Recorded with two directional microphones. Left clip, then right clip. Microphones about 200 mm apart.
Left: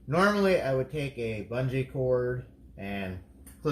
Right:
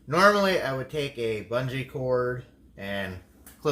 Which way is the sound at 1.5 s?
30° right (ahead or behind).